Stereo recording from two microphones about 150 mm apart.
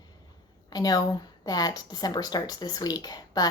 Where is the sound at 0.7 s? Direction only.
25° left (ahead or behind).